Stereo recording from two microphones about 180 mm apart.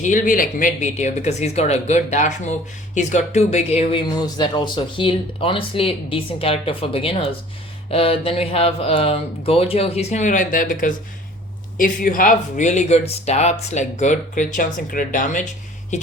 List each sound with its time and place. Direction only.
0.0 s speech: 50° left (ahead or behind)
4.1 s speech: 25° left (ahead or behind); by 15.4 s 45° left (ahead or behind)
15.9 s music: 40° left (ahead or behind)